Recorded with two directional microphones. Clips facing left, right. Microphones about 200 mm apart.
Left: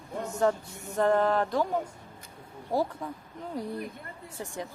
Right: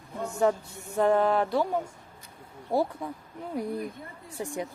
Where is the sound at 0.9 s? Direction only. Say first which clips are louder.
Right 1 dB; 10° right (ahead or behind).